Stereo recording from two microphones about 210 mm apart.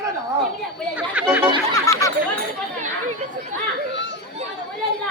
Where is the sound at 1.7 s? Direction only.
15° left (ahead or behind).